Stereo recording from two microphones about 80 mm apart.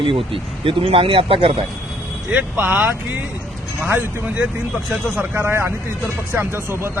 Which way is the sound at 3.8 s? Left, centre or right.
Right.